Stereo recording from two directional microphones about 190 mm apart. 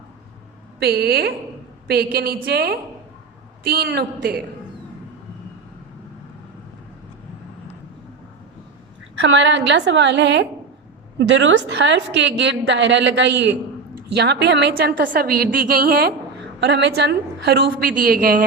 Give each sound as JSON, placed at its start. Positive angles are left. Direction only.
{"t": 0.8, "sound": "a woman's voice", "side_deg": -55}
{"t": 9.2, "sound": "a woman's voice", "side_deg": -70}
{"t": 16.6, "sound": "a woman's voice", "side_deg": -65}